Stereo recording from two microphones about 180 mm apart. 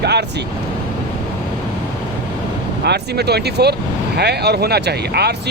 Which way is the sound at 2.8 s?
65° right (ahead or behind).